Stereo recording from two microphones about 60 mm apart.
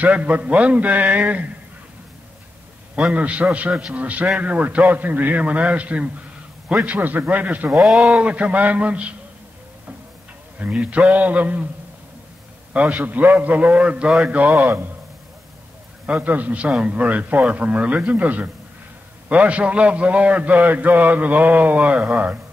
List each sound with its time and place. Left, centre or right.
0.0 s a man's voice: right
3.1 s a man's voice: right
7.7 s speech: centre
8.2 s a man's voice: right
10.6 s a man's voice: right
12.7 s a man's voice: right
14.5 s a man's voice: right
16.1 s a man's voice: right